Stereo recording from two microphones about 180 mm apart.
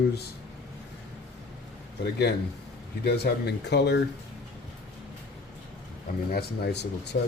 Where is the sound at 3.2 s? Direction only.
65° left (ahead or behind).